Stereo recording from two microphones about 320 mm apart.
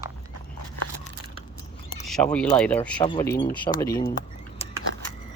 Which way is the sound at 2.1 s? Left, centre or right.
Centre.